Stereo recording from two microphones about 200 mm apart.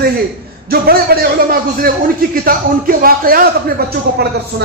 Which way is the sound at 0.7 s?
50° right (ahead or behind).